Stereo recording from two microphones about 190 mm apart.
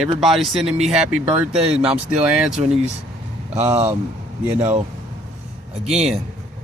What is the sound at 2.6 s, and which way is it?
Speech, 35° right (ahead or behind).